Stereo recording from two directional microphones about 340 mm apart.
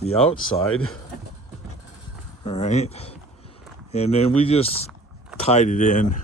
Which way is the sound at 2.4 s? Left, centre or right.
Centre.